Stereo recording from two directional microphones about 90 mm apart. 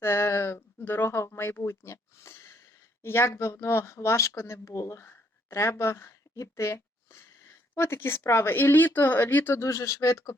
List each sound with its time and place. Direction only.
0.0 s speech: 30° left (ahead or behind)
9.6 s speech: 35° left (ahead or behind)